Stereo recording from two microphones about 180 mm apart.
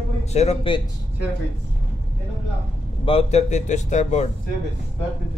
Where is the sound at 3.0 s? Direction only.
35° left (ahead or behind).